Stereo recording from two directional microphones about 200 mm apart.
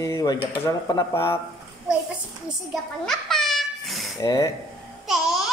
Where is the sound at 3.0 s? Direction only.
Centre (ahead or behind).